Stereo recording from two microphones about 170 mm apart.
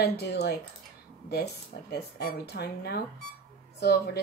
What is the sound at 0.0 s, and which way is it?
Speech, 75° left (ahead or behind).